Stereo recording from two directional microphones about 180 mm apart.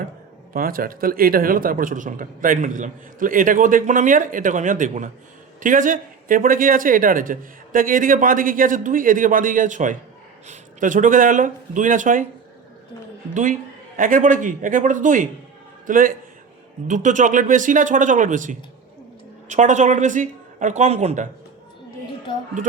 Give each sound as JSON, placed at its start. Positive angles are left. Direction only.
{"t": 0.5, "sound": "a man's voice", "side_deg": -50}
{"t": 13.3, "sound": "a man's voice", "side_deg": -45}